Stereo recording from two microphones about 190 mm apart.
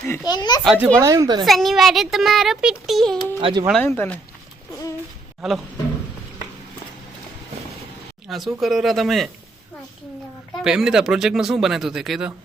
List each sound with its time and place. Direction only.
0.3 s a child's voice: 20° left (ahead or behind)
0.6 s speech: centre (ahead or behind)
0.9 s a woman's voice: 15° right (ahead or behind)
1.5 s speech: centre (ahead or behind)
3.4 s a woman's voice: 20° right (ahead or behind)
3.7 s speech: 10° left (ahead or behind)
5.4 s speech: centre (ahead or behind)
8.3 s speech: centre (ahead or behind)
10.6 s speech: 5° right (ahead or behind)